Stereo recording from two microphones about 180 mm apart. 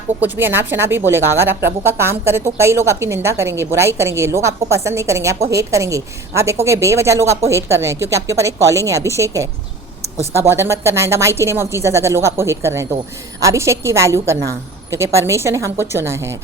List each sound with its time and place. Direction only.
0.2 s a woman's voice: 10° right (ahead or behind)